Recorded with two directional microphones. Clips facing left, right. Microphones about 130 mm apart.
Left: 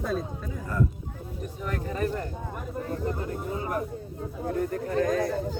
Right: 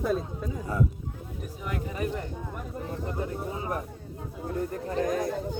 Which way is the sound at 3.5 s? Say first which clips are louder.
Left 3 dB; 20° right (ahead or behind).